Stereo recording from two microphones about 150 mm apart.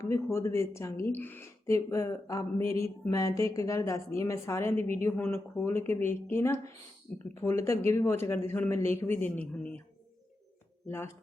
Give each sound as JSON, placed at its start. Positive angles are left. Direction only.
{"t": 0.0, "sound": "a woman's voice", "side_deg": 20}
{"t": 4.8, "sound": "a woman's voice", "side_deg": -50}
{"t": 5.0, "sound": "a woman's voice", "side_deg": 15}
{"t": 10.8, "sound": "a woman's voice", "side_deg": 15}